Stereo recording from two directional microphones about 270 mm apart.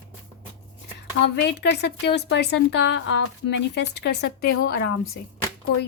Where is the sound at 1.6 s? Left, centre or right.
Left.